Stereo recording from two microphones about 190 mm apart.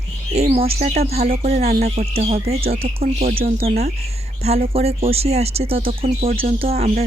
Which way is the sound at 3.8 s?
35° right (ahead or behind).